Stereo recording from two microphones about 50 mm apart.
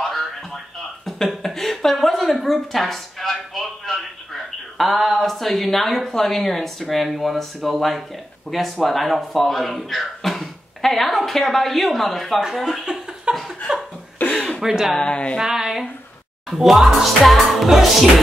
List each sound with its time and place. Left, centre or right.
0.0 s music: centre
1.0 s a woman's voice: centre
13.3 s chuckle: centre
13.7 s laughter: centre
14.6 s speech: centre
15.0 s speech: centre
15.3 s speech: centre